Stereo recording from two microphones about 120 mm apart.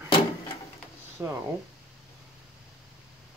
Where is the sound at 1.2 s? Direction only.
20° right (ahead or behind).